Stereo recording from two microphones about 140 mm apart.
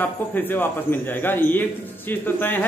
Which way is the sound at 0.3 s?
15° left (ahead or behind).